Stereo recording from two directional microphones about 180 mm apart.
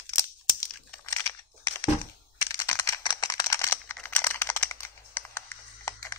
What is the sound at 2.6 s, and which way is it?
Computer keyboard, 20° left (ahead or behind).